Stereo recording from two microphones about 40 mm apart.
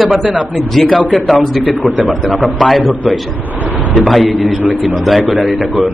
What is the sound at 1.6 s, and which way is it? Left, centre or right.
Speech, right.